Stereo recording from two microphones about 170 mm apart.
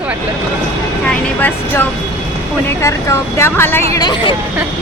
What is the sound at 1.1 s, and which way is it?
Vehicle, 10° left (ahead or behind).